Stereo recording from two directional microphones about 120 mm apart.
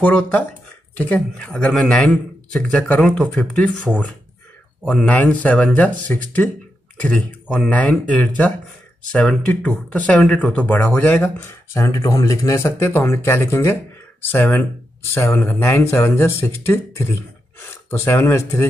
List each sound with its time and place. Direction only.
0.0 s speech: 10° left (ahead or behind)
4.8 s speech: 10° left (ahead or behind)